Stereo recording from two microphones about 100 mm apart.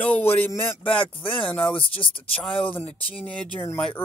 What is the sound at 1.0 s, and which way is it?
Speech, 60° left (ahead or behind).